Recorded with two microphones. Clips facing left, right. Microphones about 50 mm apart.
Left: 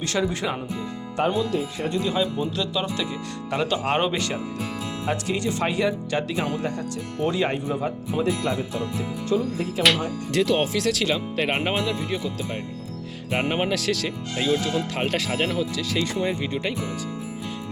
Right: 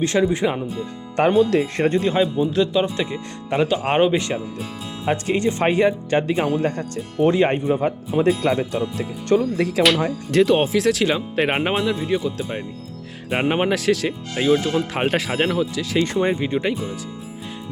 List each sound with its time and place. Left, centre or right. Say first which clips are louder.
0.0 s speech: right 6 dB; right
1.5 s speech: right 7 dB; right
1.9 s speech: right 3 dB; right
2.2 s speech: right 7 dB; right
5.0 s speech: right 6 dB; right
6.6 s speech: right 5 dB; right
9.0 s speech: right 5 dB; right
10.3 s speech: right 5 dB; right
10.7 s speech: right 5 dB; centre
13.3 s speech: right 4 dB; right
14.3 s speech: right 5 dB; right
15.4 s speech: right 4 dB; centre
16.0 s speech: right 5 dB; right
16.3 s speech: right 5 dB; right